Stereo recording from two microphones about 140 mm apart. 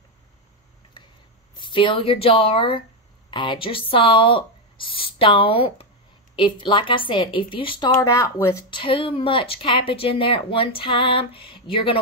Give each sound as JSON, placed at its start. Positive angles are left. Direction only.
{"t": 1.0, "sound": "a sound", "side_deg": 35}
{"t": 1.6, "sound": "a woman's voice", "side_deg": 35}
{"t": 7.9, "sound": "speech", "side_deg": 25}
{"t": 8.6, "sound": "a woman's voice", "side_deg": 35}